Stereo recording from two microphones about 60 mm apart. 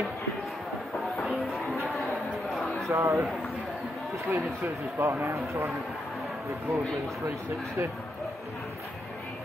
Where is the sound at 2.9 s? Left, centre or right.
Right.